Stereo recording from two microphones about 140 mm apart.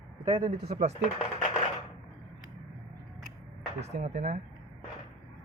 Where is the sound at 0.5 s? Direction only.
90° right.